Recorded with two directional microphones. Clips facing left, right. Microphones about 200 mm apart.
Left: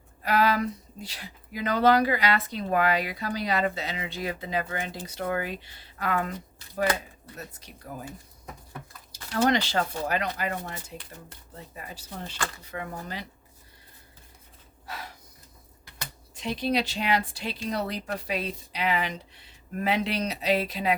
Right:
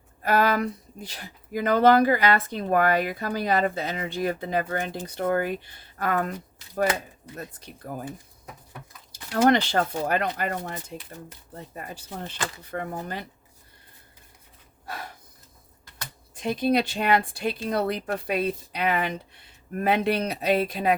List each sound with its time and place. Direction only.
0.2 s a sound: 50° right (ahead or behind)
1.1 s speech: 50° right (ahead or behind)
7.3 s speech: 55° right (ahead or behind)
9.3 s speech: 55° right (ahead or behind)
14.8 s gasp: 50° right (ahead or behind)
16.3 s speech: 50° right (ahead or behind)